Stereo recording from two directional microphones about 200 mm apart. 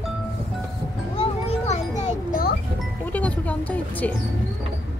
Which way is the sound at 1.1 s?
30° left (ahead or behind).